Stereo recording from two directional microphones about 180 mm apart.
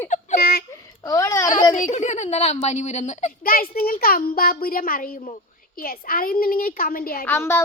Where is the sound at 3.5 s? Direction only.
55° left (ahead or behind).